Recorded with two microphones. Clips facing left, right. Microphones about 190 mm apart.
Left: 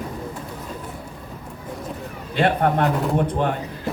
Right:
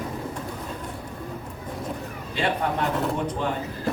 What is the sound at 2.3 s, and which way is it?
Speech, 55° left (ahead or behind).